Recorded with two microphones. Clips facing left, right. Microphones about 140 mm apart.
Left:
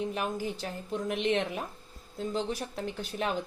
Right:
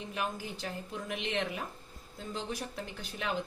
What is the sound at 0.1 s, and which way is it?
A woman's voice, 40° left (ahead or behind).